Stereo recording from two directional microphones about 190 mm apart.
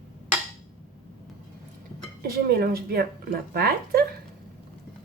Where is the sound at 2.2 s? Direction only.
55° right (ahead or behind).